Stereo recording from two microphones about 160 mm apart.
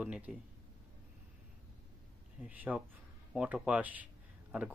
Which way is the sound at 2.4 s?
10° right (ahead or behind).